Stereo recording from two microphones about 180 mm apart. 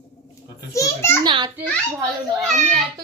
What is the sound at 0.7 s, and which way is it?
Speech, 15° left (ahead or behind).